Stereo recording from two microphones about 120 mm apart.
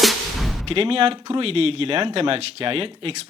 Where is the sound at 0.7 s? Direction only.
50° right (ahead or behind).